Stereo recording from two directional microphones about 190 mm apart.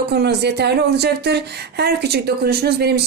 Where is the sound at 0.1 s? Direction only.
60° right (ahead or behind).